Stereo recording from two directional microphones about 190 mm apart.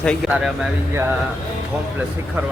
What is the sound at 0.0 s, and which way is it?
Speech, centre (ahead or behind).